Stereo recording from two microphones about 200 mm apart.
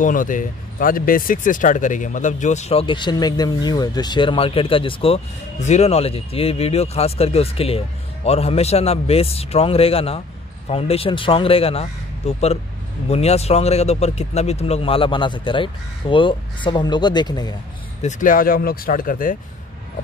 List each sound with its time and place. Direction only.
0.0 s speech: 40° left (ahead or behind); by 17.6 s 20° left (ahead or behind)
18.0 s speech: 45° left (ahead or behind)